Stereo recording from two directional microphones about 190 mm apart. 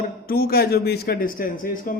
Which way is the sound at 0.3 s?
50° left (ahead or behind).